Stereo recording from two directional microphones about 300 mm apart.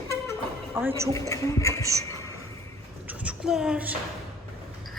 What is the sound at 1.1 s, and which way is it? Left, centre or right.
Speech, centre.